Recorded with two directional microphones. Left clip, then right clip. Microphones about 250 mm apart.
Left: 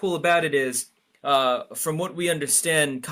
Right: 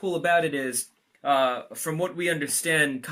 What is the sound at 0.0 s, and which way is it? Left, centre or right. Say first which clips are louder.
Speech: left 2 dB; left.